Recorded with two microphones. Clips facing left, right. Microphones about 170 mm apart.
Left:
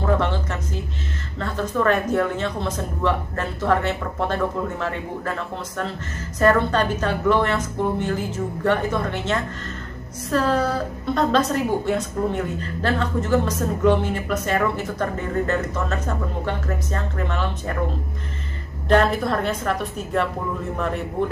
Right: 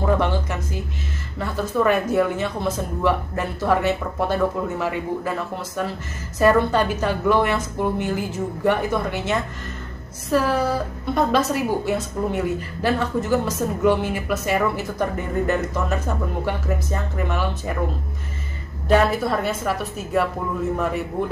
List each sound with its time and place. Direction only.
0.0 s music: 10° right (ahead or behind)
1.4 s a woman's voice: 10° right (ahead or behind)
18.9 s a woman's voice: 5° right (ahead or behind)